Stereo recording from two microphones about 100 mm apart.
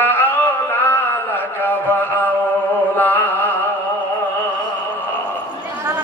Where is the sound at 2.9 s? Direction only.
20° left (ahead or behind).